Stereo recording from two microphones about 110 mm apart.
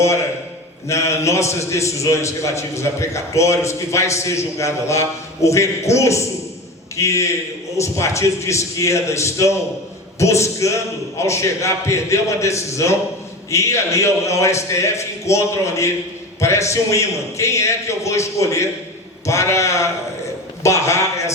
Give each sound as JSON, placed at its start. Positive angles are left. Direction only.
{"t": 0.9, "sound": "a man's voice", "side_deg": 25}